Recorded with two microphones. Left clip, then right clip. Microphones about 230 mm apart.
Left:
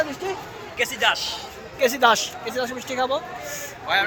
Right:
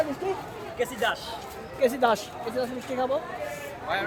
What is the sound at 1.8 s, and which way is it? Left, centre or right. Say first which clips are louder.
Speech: left 5 dB; centre.